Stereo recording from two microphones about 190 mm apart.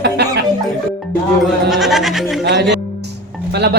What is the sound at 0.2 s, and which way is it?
Music, 60° right (ahead or behind).